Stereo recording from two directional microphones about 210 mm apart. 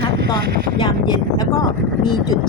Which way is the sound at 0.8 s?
20° left (ahead or behind).